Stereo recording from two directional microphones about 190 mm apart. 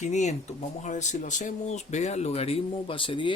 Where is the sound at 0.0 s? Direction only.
40° left (ahead or behind).